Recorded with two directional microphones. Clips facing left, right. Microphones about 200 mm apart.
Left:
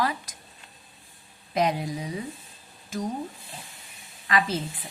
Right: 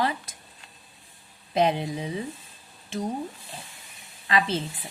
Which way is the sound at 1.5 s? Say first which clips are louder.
Right 2 dB; 25° right (ahead or behind).